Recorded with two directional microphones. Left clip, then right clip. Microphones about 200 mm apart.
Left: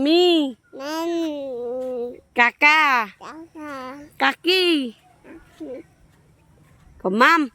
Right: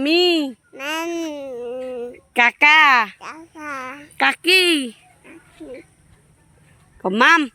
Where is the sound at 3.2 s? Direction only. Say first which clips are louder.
Right 3 dB; 20° left (ahead or behind).